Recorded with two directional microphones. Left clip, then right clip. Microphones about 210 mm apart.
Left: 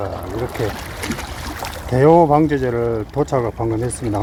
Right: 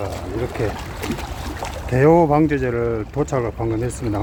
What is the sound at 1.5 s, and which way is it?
Boat, 35° left (ahead or behind).